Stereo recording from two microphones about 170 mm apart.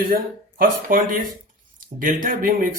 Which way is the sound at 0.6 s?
55° right (ahead or behind).